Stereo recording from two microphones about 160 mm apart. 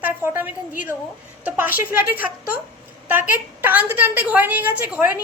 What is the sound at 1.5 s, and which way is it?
A woman's voice, 10° right (ahead or behind).